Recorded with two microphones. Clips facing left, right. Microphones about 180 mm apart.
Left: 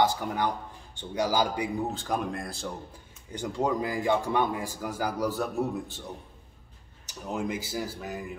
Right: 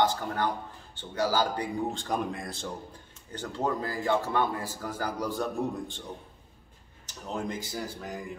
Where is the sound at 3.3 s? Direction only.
10° left (ahead or behind).